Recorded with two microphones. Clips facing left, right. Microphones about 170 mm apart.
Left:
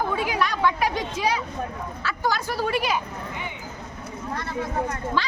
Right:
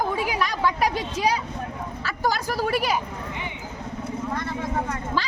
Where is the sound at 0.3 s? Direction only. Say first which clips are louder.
Left 1 dB; 40° right (ahead or behind).